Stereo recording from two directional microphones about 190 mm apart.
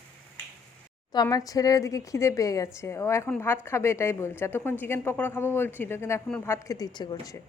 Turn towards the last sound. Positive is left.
turn(degrees=20)  # may be behind; listen again after turning